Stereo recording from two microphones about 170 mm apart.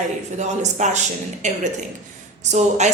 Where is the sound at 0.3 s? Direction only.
45° right (ahead or behind).